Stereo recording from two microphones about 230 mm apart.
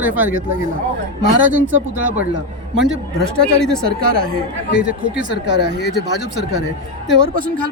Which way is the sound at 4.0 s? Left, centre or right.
Right.